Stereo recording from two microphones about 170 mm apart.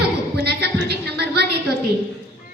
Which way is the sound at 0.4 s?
70° right (ahead or behind).